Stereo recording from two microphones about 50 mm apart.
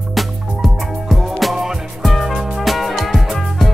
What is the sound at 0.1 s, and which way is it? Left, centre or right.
Music, centre.